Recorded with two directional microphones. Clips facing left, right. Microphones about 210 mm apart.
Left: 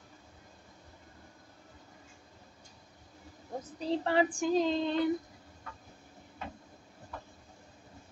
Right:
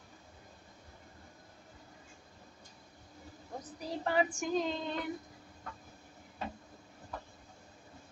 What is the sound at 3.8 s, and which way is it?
Child singing, 30° left (ahead or behind).